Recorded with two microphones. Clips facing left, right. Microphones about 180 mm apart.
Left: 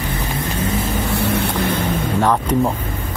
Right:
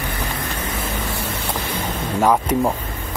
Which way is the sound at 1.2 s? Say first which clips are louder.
Left 7 dB; 65° left (ahead or behind).